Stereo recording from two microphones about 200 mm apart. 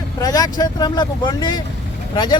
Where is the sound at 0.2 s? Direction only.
20° left (ahead or behind).